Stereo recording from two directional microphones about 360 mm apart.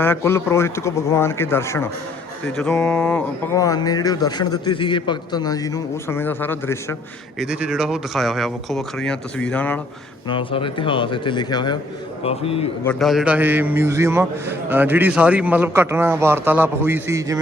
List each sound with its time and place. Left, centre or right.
0.0 s a man's voice: centre
10.2 s speech: centre
12.8 s a man's voice: centre